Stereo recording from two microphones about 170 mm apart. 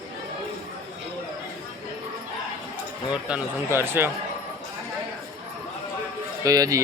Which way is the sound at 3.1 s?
10° right (ahead or behind).